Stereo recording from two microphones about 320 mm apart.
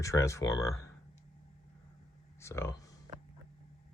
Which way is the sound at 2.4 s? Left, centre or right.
Centre.